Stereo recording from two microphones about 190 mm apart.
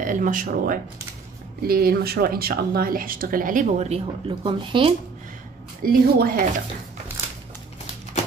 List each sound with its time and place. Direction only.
0.0 s speech: 45° right (ahead or behind); by 4.9 s 25° right (ahead or behind)
5.8 s speech: 50° right (ahead or behind)